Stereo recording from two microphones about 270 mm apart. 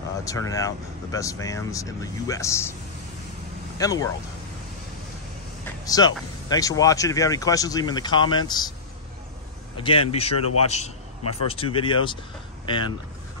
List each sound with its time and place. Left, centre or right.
0.2 s speech: centre
3.7 s speech: centre
5.9 s speech: centre
9.8 s speech: centre